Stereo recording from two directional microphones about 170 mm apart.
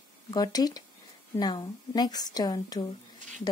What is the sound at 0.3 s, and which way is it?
Speech, 20° left (ahead or behind).